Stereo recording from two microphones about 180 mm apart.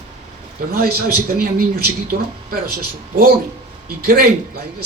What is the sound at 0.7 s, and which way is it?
A man's voice, 55° right (ahead or behind).